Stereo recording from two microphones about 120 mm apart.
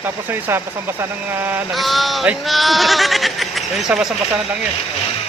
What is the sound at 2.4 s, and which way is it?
Speech, centre (ahead or behind).